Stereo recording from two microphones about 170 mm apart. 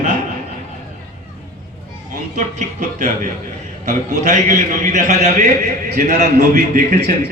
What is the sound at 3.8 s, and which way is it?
A man's voice, 45° right (ahead or behind).